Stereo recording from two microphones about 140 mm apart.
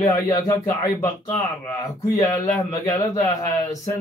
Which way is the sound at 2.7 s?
25° left (ahead or behind).